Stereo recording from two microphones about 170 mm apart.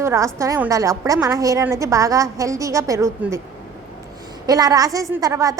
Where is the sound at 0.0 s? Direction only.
15° right (ahead or behind).